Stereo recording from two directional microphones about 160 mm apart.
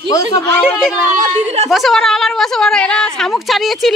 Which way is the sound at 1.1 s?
50° right (ahead or behind).